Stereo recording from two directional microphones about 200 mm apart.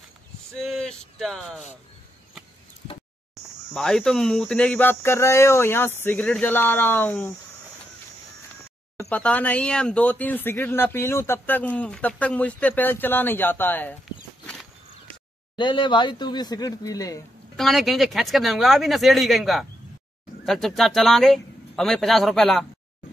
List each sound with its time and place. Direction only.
0.8 s speech: 5° left (ahead or behind)
3.7 s speech: 5° left (ahead or behind)
9.1 s speech: 5° left (ahead or behind)
14.4 s a sound: 5° left (ahead or behind)
15.5 s speech: 25° left (ahead or behind)
17.6 s speech: centre (ahead or behind)